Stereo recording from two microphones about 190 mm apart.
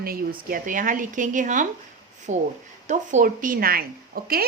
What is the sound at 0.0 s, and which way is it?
Speech, 50° right (ahead or behind).